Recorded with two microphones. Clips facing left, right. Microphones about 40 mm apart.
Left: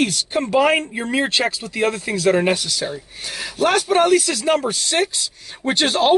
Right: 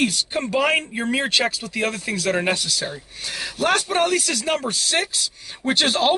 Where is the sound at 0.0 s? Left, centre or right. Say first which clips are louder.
Left 2 dB; centre.